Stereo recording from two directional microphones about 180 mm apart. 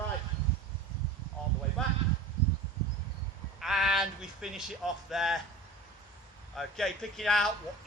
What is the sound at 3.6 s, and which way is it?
A man's voice, centre (ahead or behind).